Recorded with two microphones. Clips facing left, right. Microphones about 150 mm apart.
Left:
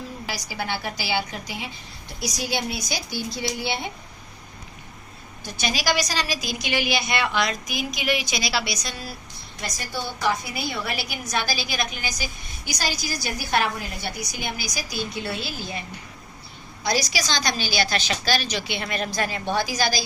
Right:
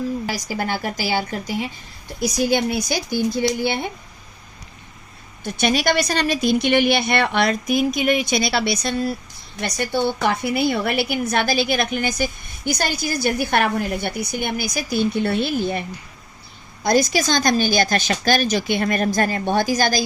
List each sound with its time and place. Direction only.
0.3 s a woman's voice: 45° right (ahead or behind)
5.4 s a woman's voice: 55° right (ahead or behind)
16.8 s a woman's voice: 50° right (ahead or behind)